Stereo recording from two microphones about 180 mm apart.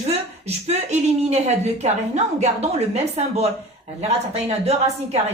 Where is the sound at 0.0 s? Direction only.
35° right (ahead or behind).